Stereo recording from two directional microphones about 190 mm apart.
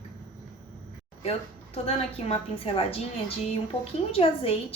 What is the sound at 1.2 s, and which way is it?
A woman's voice, 30° left (ahead or behind).